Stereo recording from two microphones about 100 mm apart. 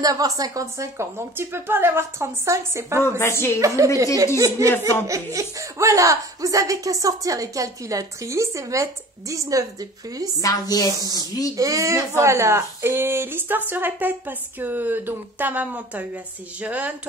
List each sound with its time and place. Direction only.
0.0 s speech: 40° right (ahead or behind)
3.0 s a woman's voice: 25° left (ahead or behind)
3.6 s speech: 30° right (ahead or behind)
10.4 s speech: 40° left (ahead or behind)
11.0 s speech: 40° right (ahead or behind); by 17.1 s 15° right (ahead or behind)